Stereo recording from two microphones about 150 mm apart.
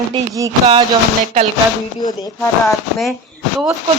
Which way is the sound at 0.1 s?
20° right (ahead or behind).